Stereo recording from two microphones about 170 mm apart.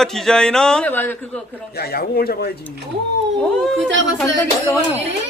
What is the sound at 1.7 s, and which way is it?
Speech, 65° left (ahead or behind).